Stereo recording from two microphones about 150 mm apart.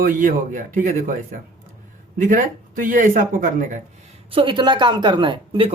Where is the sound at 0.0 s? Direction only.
65° right (ahead or behind).